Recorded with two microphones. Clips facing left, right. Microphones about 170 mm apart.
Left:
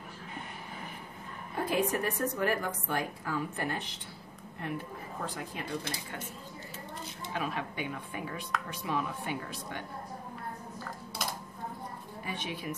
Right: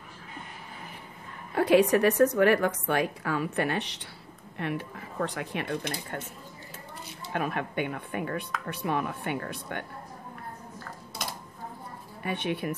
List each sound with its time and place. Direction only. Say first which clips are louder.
1.5 s a woman's voice: right 9 dB; 75° right (ahead or behind)
7.3 s speech: right 6 dB; 55° right (ahead or behind)
12.2 s speech: right 8 dB; 60° right (ahead or behind)